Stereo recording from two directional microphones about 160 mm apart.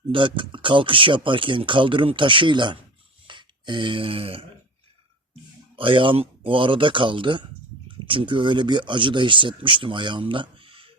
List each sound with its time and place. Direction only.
0.1 s speech: 30° right (ahead or behind)
5.7 s speech: 30° right (ahead or behind)